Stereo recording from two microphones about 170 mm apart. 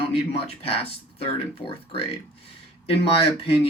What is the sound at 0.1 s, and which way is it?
Speech, 35° left (ahead or behind).